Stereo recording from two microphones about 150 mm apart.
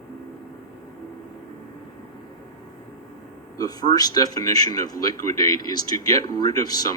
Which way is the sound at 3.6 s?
25° left (ahead or behind).